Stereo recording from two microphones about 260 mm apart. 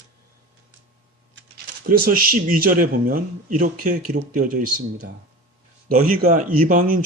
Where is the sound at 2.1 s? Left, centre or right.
Right.